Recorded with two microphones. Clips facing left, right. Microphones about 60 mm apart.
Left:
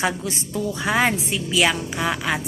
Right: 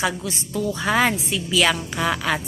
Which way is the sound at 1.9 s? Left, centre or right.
Centre.